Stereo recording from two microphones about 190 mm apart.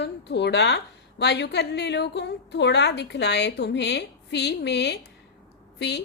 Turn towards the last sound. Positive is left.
turn(degrees=60)  # may be behind; listen again after turning